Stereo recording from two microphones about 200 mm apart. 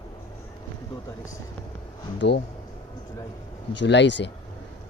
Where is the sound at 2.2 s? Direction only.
60° left (ahead or behind).